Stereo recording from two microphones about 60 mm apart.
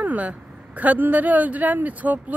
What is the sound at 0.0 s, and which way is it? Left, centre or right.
Speech, right.